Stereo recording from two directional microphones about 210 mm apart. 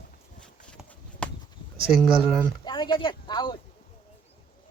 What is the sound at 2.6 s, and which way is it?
Speech, 20° left (ahead or behind).